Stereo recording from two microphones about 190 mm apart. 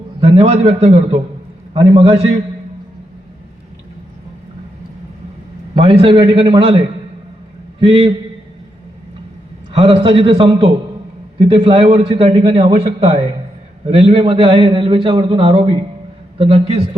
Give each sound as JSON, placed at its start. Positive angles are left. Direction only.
{"t": 0.2, "sound": "a man's voice", "side_deg": -30}
{"t": 5.7, "sound": "a man's voice", "side_deg": -30}
{"t": 7.8, "sound": "a man's voice", "side_deg": -30}
{"t": 9.7, "sound": "a man's voice", "side_deg": -30}